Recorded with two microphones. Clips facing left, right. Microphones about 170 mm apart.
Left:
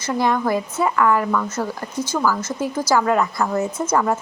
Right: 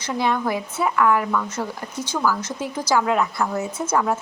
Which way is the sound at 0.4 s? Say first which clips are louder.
Left 3 dB; 10° right (ahead or behind).